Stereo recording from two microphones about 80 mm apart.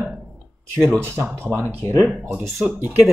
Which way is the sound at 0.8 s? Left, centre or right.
Right.